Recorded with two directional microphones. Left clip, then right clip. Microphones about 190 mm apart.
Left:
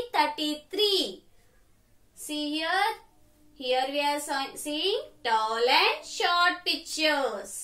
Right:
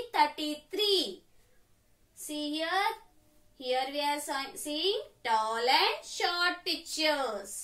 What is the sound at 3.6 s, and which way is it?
Speech, 5° left (ahead or behind).